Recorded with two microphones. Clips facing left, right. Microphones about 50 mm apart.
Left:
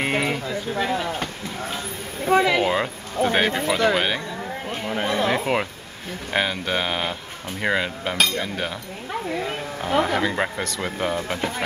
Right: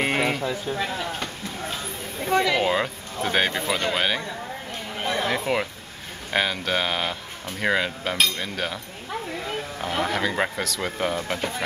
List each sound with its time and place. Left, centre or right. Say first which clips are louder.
0.0 s a sound: even; centre
0.7 s speech: left 4 dB; centre
2.6 s speech: left 1 dB; centre
9.8 s speech: left 5 dB; centre